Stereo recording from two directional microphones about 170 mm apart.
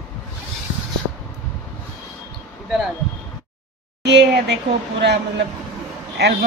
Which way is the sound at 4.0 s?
90° right.